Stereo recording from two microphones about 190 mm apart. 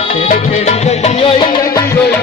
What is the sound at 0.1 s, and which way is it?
Music, 35° left (ahead or behind).